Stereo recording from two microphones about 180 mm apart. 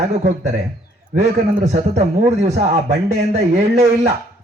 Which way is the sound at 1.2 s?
40° right (ahead or behind).